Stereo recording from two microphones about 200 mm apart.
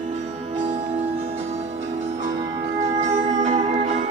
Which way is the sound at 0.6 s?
35° right (ahead or behind).